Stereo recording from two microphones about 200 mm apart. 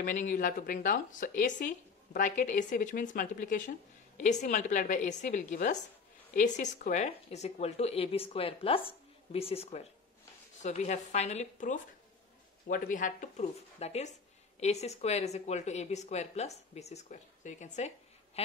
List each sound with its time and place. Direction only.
0.0 s a woman's voice: 40° left (ahead or behind)